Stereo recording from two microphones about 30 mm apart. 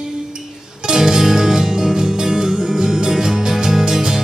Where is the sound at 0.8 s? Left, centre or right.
Centre.